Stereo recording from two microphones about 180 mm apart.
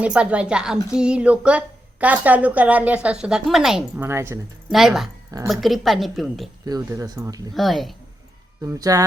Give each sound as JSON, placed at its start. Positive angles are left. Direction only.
{"t": 0.0, "sound": "a woman's voice", "side_deg": -5}
{"t": 4.0, "sound": "a woman's voice", "side_deg": -15}
{"t": 4.7, "sound": "a woman's voice", "side_deg": 0}
{"t": 6.7, "sound": "speech", "side_deg": -20}
{"t": 7.5, "sound": "a woman's voice", "side_deg": 0}
{"t": 8.6, "sound": "speech", "side_deg": -20}